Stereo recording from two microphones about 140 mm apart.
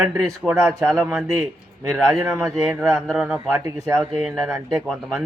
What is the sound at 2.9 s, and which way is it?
Speech, 5° right (ahead or behind).